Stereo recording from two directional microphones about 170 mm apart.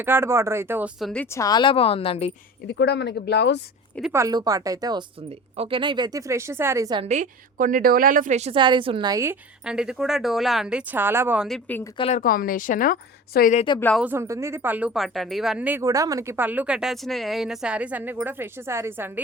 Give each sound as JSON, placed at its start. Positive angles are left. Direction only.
{"t": 0.0, "sound": "speech", "side_deg": -15}
{"t": 0.9, "sound": "speech", "side_deg": 0}
{"t": 1.2, "sound": "speech", "side_deg": 15}
{"t": 2.6, "sound": "speech", "side_deg": 90}
{"t": 4.1, "sound": "speech", "side_deg": -20}
{"t": 7.0, "sound": "a woman's voice", "side_deg": -45}
{"t": 9.6, "sound": "speech", "side_deg": -5}
{"t": 11.4, "sound": "speech", "side_deg": 0}
{"t": 11.9, "sound": "speech", "side_deg": 35}
{"t": 12.2, "sound": "a woman's voice", "side_deg": 55}
{"t": 13.7, "sound": "speech", "side_deg": 10}
{"t": 14.0, "sound": "speech", "side_deg": -15}
{"t": 15.8, "sound": "speech", "side_deg": -20}